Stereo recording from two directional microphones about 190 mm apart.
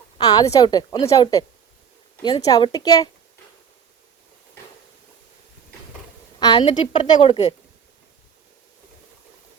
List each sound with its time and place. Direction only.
0.2 s a woman's voice: 20° left (ahead or behind)
6.4 s a woman's voice: 25° left (ahead or behind)